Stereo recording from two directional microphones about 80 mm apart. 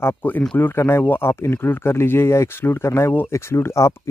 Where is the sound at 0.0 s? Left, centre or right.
Left.